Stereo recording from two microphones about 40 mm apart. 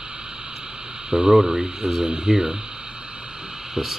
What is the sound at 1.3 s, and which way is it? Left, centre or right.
Speech, centre.